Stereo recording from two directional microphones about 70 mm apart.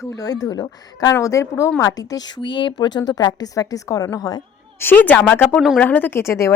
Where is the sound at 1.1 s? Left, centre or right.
Left.